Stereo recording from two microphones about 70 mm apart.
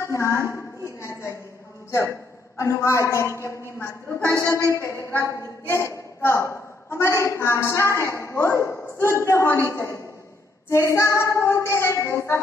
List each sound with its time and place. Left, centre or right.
0.0 s a sound: left
1.9 s a man's voice: left
4.7 s child singing: left
5.0 s a woman's voice: right
5.4 s a woman's voice: left
9.0 s child singing: left